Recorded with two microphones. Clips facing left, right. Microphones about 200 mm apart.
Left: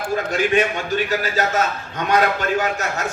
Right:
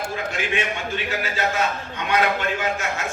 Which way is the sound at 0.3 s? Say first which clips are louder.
Left 9 dB; 40° left (ahead or behind).